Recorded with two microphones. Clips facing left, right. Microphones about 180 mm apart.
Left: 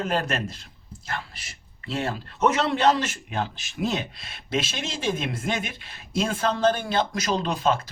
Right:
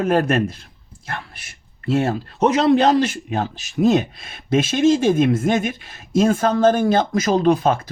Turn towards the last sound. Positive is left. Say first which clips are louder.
# right 8 dB
turn(degrees=-50)  # may be behind; listen again after turning